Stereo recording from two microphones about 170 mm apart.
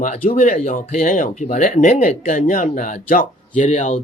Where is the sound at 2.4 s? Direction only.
55° left (ahead or behind).